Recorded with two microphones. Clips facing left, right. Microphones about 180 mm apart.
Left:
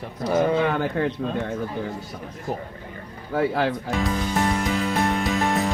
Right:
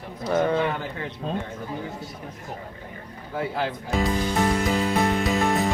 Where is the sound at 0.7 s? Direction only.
55° left (ahead or behind).